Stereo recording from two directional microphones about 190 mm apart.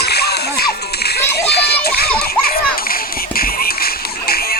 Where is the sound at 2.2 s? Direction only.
50° left (ahead or behind).